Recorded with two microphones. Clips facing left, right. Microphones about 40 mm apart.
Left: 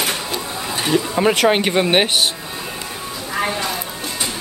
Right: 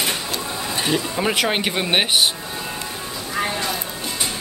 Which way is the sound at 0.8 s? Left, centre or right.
Centre.